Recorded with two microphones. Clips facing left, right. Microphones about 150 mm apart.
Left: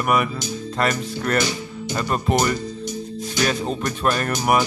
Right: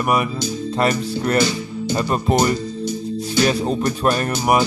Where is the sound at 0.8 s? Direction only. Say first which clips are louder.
Right 3 dB; 25° right (ahead or behind).